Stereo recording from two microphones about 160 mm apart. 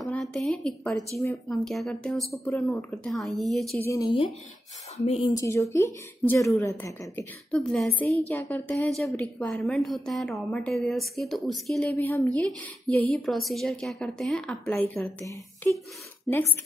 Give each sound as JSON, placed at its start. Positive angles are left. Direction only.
{"t": 0.0, "sound": "a woman's voice", "side_deg": 5}
{"t": 1.1, "sound": "speech", "side_deg": 20}
{"t": 1.5, "sound": "a woman's voice", "side_deg": 0}
{"t": 3.7, "sound": "a woman's voice", "side_deg": 15}
{"t": 4.0, "sound": "speech", "side_deg": 30}
{"t": 5.3, "sound": "a woman's voice", "side_deg": 20}